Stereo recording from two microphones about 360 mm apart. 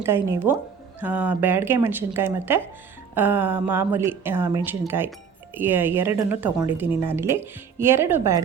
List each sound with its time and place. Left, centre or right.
0.0 s a woman's voice: centre